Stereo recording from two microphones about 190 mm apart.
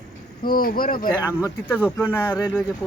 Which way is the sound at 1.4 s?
10° left (ahead or behind).